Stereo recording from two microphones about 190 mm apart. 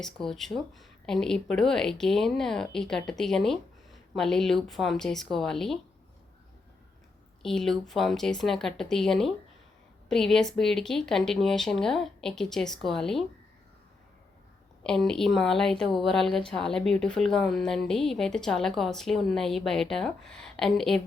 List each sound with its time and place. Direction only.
0.0 s speech: centre (ahead or behind)
7.4 s speech: centre (ahead or behind)
14.8 s speech: 5° left (ahead or behind)